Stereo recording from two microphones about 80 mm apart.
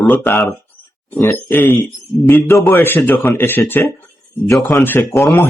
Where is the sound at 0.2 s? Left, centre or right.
Left.